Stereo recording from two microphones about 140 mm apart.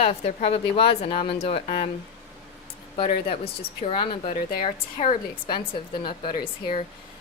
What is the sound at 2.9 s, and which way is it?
A woman's voice, 40° left (ahead or behind).